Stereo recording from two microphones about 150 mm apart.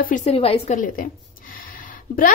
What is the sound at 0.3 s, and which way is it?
Speech, 40° left (ahead or behind).